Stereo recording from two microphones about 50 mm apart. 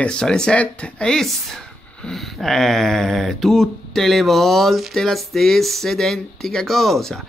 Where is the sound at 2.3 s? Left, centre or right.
Centre.